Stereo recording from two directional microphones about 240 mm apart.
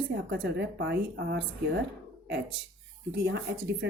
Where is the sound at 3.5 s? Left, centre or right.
Right.